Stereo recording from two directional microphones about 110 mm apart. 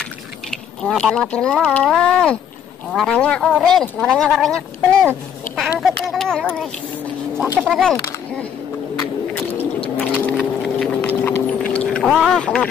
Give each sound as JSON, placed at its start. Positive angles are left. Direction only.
{"t": 0.8, "sound": "a woman's voice", "side_deg": 5}
{"t": 6.0, "sound": "a sound", "side_deg": 5}
{"t": 7.5, "sound": "a woman's voice", "side_deg": -5}
{"t": 7.8, "sound": "a sound", "side_deg": 5}
{"t": 9.9, "sound": "vehicle", "side_deg": 15}
{"t": 10.8, "sound": "boat", "side_deg": 10}
{"t": 12.0, "sound": "speech", "side_deg": 0}
{"t": 12.4, "sound": "speech", "side_deg": 10}